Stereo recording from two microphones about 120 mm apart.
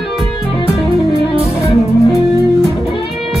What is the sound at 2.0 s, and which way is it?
Music, 30° left (ahead or behind).